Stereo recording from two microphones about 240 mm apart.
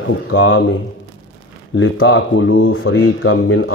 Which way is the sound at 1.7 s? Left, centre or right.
Left.